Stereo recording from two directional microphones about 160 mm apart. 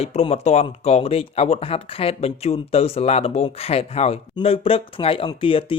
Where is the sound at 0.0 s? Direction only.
40° left (ahead or behind).